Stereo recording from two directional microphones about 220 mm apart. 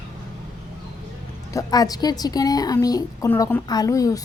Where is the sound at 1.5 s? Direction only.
15° left (ahead or behind).